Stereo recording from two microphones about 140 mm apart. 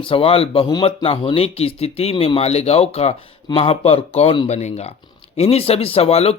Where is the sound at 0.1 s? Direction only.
40° left (ahead or behind).